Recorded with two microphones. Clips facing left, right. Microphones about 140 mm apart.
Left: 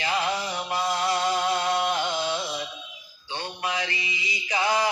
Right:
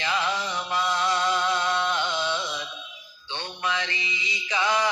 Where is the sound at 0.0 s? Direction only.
40° left (ahead or behind).